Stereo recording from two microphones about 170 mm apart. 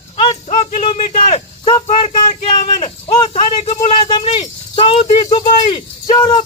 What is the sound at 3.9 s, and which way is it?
Rattle, 30° left (ahead or behind).